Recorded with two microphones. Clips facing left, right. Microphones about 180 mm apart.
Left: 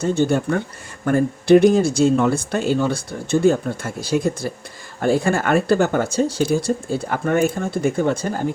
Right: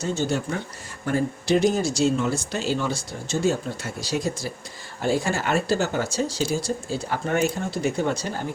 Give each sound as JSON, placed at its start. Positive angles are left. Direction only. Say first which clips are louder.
{"t": 0.0, "sound": "speech", "louder": "left 7 dB", "side_deg": 55}